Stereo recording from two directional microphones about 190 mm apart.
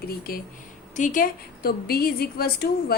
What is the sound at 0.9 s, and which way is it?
A woman's voice, 45° left (ahead or behind).